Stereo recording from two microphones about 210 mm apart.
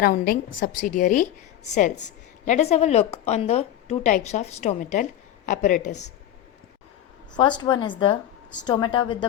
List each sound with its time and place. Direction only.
0.0 s a woman's voice: 45° left (ahead or behind)
7.3 s a woman's voice: 20° left (ahead or behind)